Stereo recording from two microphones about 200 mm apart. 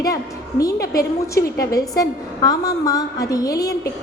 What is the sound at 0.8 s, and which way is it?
Speech, 50° left (ahead or behind).